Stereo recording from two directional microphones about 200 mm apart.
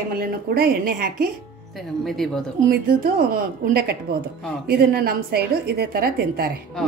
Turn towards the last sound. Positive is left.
turn(degrees=-50)  # may be behind; listen again after turning